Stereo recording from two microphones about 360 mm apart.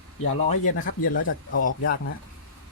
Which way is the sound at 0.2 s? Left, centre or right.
Left.